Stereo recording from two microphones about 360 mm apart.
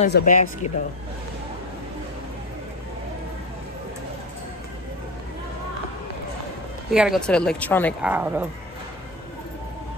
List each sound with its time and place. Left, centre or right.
0.0 s speech: left
6.9 s speech: centre